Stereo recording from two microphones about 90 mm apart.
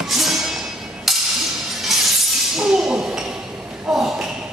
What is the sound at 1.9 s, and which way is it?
Shatter, centre (ahead or behind).